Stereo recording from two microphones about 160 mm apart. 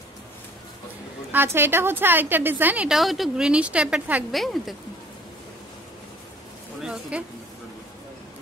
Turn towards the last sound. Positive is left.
turn(degrees=-5)  # may be behind; listen again after turning